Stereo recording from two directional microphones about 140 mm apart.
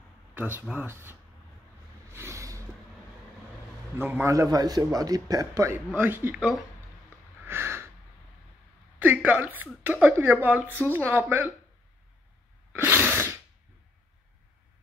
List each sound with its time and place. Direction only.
0.3 s speech: 15° right (ahead or behind)
2.1 s vehicle: 20° right (ahead or behind)
4.0 s a man's voice: 15° right (ahead or behind)
7.4 s snort: 15° right (ahead or behind)
9.0 s a woman's voice: 10° right (ahead or behind)
12.7 s sneeze: 15° right (ahead or behind)